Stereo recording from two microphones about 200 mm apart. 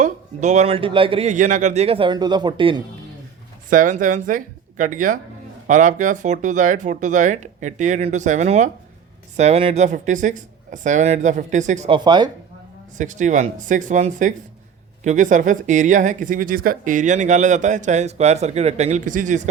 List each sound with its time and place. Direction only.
0.0 s speech: 35° right (ahead or behind)
3.7 s speech: 40° right (ahead or behind)
11.9 s speech: 20° right (ahead or behind)
13.0 s speech: 40° right (ahead or behind)